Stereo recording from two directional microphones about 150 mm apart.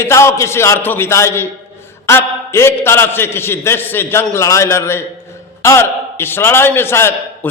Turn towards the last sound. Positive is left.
turn(degrees=15)  # may be behind; listen again after turning